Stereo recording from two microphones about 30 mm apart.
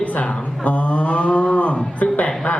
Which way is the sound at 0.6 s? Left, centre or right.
Left.